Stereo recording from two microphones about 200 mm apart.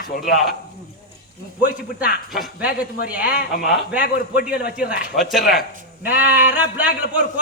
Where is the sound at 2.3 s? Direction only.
Centre (ahead or behind).